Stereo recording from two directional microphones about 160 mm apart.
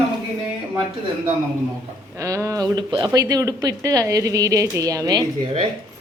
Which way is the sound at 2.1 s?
15° right (ahead or behind).